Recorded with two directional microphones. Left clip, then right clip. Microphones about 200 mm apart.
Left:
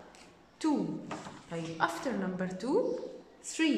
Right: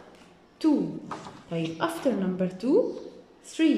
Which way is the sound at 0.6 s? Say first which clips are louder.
Right 7 dB; centre (ahead or behind).